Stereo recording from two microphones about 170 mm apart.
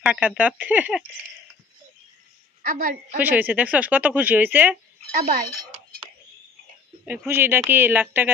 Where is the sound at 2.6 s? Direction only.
55° right (ahead or behind).